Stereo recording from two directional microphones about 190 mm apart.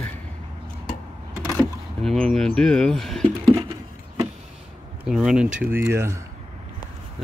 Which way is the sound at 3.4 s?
20° right (ahead or behind).